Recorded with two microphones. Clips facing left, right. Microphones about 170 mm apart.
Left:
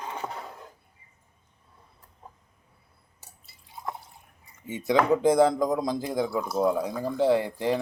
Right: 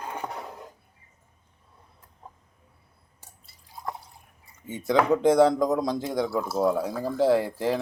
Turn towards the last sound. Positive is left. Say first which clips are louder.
# right 1 dB
turn(degrees=-5)  # may be behind; listen again after turning